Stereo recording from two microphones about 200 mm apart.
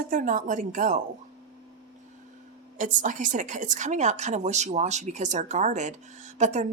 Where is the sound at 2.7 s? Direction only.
40° right (ahead or behind).